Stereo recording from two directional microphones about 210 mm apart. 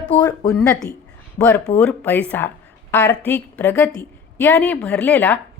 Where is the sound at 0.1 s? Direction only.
20° left (ahead or behind).